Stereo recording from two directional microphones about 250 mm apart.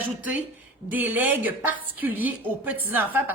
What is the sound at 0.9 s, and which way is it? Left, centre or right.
A woman's voice, centre.